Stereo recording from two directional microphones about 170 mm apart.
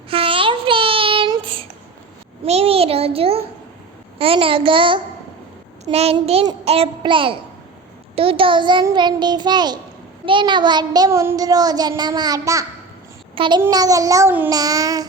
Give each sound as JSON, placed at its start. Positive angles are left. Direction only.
{"t": 0.1, "sound": "child singing", "side_deg": -30}
{"t": 2.4, "sound": "a sound", "side_deg": -35}
{"t": 4.2, "sound": "a child's voice", "side_deg": -35}
{"t": 8.1, "sound": "child singing", "side_deg": -35}
{"t": 13.3, "sound": "a child's voice", "side_deg": -30}
{"t": 13.6, "sound": "child singing", "side_deg": -20}